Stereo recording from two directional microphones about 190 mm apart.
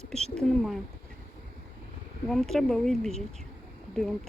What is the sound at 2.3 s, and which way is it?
Speech, centre (ahead or behind).